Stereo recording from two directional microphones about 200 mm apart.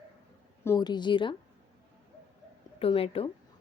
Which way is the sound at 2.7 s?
30° left (ahead or behind).